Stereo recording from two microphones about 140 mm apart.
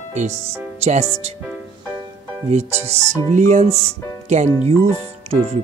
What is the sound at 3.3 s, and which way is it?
Speech, 60° right (ahead or behind).